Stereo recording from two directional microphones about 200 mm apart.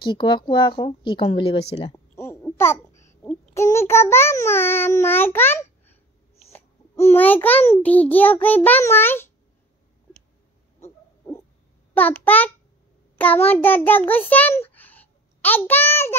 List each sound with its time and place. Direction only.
0.0 s speech: 25° left (ahead or behind)
2.1 s babbling: 10° left (ahead or behind)
3.0 s child singing: 15° left (ahead or behind)
6.5 s a child's voice: 10° left (ahead or behind)
11.9 s a child's voice: 10° left (ahead or behind)